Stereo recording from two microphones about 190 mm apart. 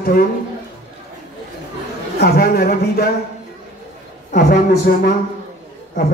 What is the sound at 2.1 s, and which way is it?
Speech, 55° left (ahead or behind).